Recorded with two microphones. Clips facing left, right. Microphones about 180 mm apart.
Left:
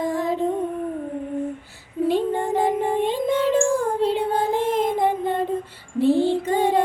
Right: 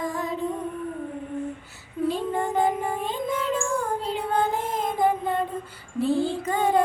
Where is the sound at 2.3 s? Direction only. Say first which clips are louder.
Left 2 dB; 30° left (ahead or behind).